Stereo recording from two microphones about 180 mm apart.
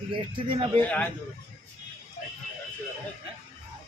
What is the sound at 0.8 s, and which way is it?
Speech, 10° left (ahead or behind).